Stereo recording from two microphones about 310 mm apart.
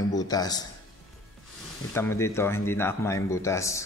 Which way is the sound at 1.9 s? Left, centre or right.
Centre.